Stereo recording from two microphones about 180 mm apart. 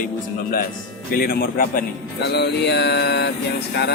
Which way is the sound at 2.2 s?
70° left (ahead or behind).